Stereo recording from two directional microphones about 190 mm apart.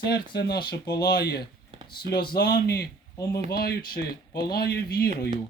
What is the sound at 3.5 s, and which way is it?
Speech, 50° left (ahead or behind).